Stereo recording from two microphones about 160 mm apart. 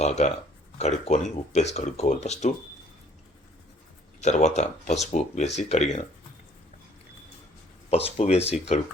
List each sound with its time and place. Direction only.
0.0 s speech: 45° left (ahead or behind)
4.2 s speech: 45° left (ahead or behind)
7.9 s speech: 40° left (ahead or behind)